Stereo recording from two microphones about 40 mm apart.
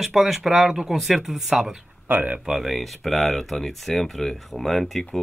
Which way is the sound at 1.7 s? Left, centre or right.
Right.